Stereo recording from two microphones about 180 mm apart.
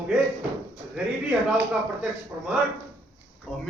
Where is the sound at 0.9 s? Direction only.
10° right (ahead or behind).